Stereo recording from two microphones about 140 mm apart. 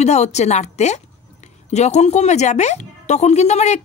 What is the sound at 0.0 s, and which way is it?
A woman's voice, 55° left (ahead or behind).